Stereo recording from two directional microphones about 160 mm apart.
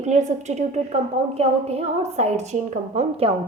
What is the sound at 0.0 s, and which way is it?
A woman's voice, 45° right (ahead or behind).